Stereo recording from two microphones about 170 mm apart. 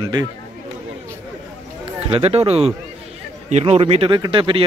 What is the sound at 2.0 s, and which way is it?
Speech, 35° right (ahead or behind).